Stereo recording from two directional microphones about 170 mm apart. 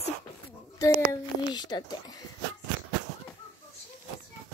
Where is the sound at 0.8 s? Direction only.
20° left (ahead or behind).